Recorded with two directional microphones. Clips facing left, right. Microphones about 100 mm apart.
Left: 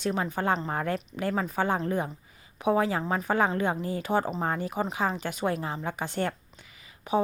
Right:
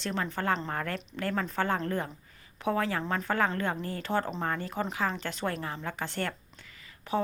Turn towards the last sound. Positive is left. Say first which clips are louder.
# left 4 dB
turn(degrees=15)  # may be behind; listen again after turning